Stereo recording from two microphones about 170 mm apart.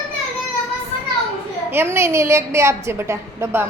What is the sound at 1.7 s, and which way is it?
Speech, 15° right (ahead or behind).